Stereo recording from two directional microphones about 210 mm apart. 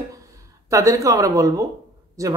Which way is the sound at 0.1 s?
15° right (ahead or behind).